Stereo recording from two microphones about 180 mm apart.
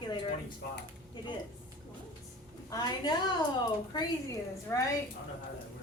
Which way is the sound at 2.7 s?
20° left (ahead or behind).